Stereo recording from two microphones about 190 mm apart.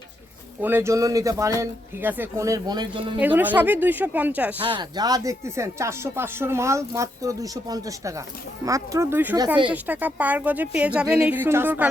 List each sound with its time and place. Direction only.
0.6 s speech: 10° right (ahead or behind)
3.2 s speech: 10° right (ahead or behind)
4.6 s speech: 25° right (ahead or behind)